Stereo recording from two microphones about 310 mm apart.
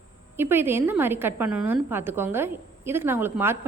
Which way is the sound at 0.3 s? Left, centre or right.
Centre.